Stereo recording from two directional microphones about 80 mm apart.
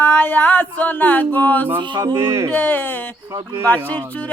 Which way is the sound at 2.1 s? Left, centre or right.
Right.